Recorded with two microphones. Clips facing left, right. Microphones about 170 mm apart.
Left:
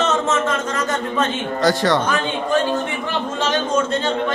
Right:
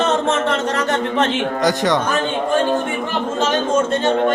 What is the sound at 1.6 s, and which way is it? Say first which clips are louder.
Speech: left 2 dB; 15° right (ahead or behind).